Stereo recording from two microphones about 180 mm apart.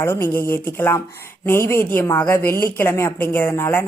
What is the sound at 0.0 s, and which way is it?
A woman's voice, 15° left (ahead or behind).